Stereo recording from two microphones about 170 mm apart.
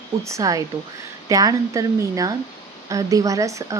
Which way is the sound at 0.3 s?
20° right (ahead or behind).